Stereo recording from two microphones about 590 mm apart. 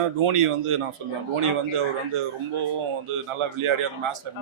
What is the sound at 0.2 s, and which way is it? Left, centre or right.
Speech, right.